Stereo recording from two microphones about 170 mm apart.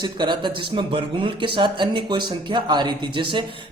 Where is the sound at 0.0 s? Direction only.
25° right (ahead or behind).